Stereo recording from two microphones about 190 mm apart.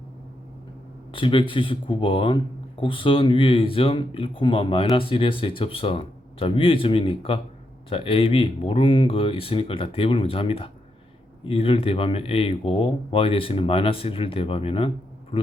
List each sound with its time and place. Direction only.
1.1 s speech: 25° left (ahead or behind)